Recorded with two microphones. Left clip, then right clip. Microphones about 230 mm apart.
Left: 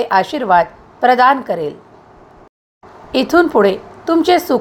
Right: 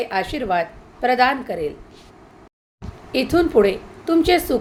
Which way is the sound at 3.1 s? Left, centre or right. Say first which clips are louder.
Left 5 dB; centre.